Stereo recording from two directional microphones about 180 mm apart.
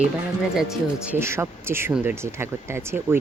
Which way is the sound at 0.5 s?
5° right (ahead or behind).